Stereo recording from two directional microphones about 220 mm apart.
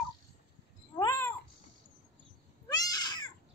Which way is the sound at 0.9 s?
15° left (ahead or behind).